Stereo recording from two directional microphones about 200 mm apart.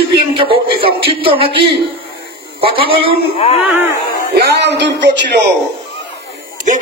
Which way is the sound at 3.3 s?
30° left (ahead or behind).